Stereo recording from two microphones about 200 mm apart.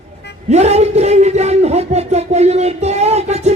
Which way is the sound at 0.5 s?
30° right (ahead or behind).